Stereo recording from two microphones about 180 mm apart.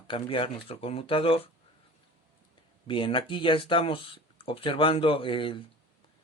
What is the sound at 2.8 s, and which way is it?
Speech, 30° left (ahead or behind).